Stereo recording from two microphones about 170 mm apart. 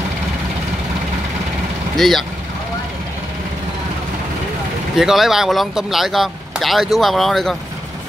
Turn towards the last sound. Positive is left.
turn(degrees=0)  # may be behind; listen again after turning